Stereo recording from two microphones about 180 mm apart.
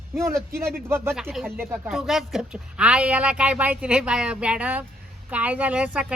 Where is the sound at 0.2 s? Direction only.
15° right (ahead or behind).